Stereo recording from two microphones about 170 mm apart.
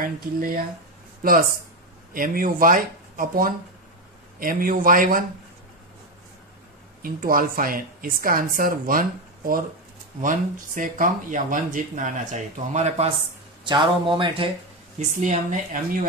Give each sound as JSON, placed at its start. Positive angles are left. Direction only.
{"t": 0.0, "sound": "a woman's voice", "side_deg": -55}
{"t": 2.1, "sound": "a woman's voice", "side_deg": -55}
{"t": 7.0, "sound": "a woman's voice", "side_deg": -55}
{"t": 10.2, "sound": "speech", "side_deg": -50}
{"t": 13.7, "sound": "speech", "side_deg": -30}
{"t": 15.0, "sound": "speech", "side_deg": -45}